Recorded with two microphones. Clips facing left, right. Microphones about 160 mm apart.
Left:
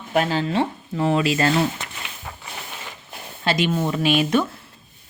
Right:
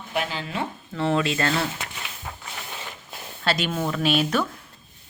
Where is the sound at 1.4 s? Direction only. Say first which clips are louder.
Left 5 dB; 20° left (ahead or behind).